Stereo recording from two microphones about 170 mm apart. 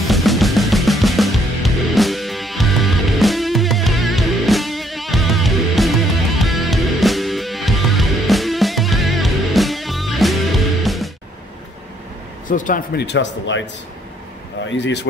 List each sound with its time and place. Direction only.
0.0 s music: centre (ahead or behind)
12.4 s a sound: 50° left (ahead or behind)
12.9 s speech: 85° left
14.7 s speech: 90° left